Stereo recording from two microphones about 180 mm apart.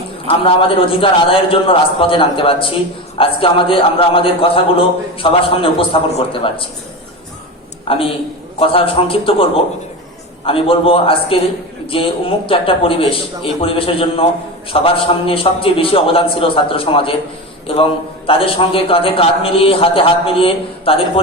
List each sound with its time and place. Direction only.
0.3 s a man's voice: 30° left (ahead or behind)
7.9 s a man's voice: 30° left (ahead or behind)